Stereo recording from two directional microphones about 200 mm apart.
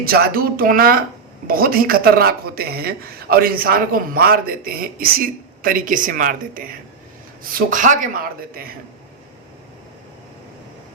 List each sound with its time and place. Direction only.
0.0 s speech: 50° right (ahead or behind)